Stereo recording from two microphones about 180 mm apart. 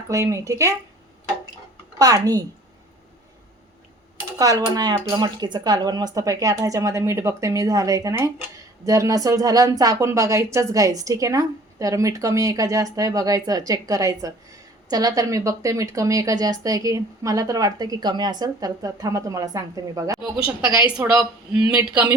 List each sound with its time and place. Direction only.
0.1 s speech: 15° right (ahead or behind)
2.0 s speech: 20° right (ahead or behind)
4.4 s a woman's voice: 20° right (ahead or behind)